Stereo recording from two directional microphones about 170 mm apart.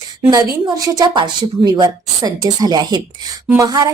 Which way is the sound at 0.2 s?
25° right (ahead or behind).